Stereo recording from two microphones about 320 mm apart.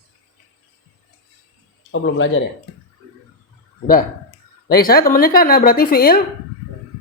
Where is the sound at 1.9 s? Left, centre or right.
Left.